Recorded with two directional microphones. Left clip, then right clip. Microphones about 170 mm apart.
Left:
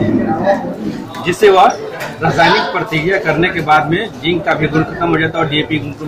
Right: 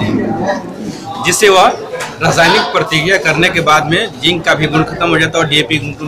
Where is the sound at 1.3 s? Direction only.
25° right (ahead or behind).